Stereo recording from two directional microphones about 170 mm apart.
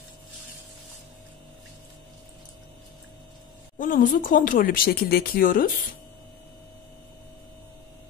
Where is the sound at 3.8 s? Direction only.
50° left (ahead or behind).